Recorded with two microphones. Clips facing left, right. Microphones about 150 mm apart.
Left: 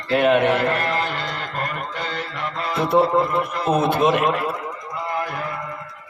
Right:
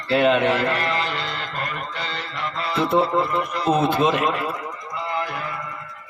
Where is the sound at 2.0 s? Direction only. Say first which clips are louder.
Left 5 dB; 50° left (ahead or behind).